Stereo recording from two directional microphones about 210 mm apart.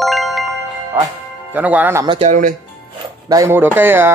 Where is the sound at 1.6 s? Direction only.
10° right (ahead or behind).